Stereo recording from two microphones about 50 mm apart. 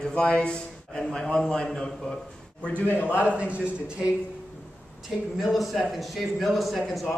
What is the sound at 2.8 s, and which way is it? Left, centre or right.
Speech, left.